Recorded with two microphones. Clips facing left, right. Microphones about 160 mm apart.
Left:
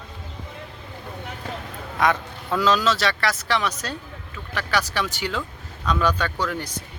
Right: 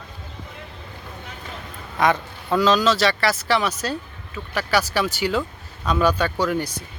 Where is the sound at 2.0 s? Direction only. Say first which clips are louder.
Right 2 dB; centre (ahead or behind).